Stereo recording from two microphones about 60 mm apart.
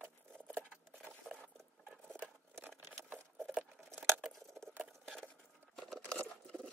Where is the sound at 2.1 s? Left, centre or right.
Right.